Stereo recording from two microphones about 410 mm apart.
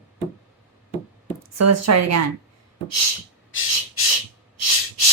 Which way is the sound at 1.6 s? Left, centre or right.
Right.